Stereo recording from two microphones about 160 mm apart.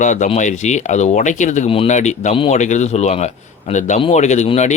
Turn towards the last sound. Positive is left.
turn(degrees=45)  # may be behind; listen again after turning